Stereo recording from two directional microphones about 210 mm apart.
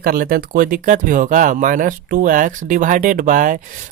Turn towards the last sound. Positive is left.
turn(degrees=-40)  # may be behind; listen again after turning